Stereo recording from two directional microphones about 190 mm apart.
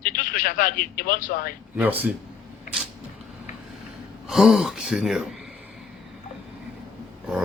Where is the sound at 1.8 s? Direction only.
10° right (ahead or behind).